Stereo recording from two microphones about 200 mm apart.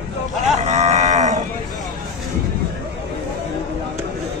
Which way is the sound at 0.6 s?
35° right (ahead or behind).